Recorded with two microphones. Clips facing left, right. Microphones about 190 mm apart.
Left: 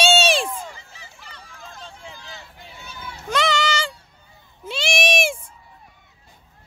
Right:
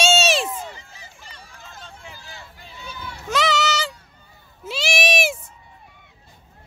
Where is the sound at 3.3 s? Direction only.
5° right (ahead or behind).